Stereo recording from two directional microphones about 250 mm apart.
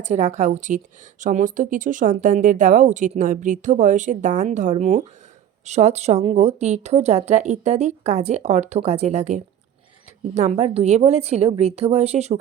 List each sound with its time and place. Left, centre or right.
0.0 s speech: right